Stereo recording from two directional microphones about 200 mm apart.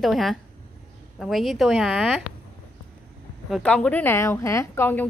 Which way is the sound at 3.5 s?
5° left (ahead or behind).